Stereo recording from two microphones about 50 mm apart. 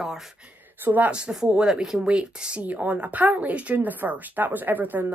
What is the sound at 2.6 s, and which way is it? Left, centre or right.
Speech, right.